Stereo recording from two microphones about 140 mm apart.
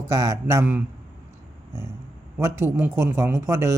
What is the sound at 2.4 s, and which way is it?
Speech, 15° right (ahead or behind).